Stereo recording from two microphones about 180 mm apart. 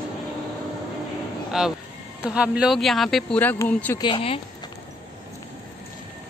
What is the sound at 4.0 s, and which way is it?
Speech, 30° left (ahead or behind).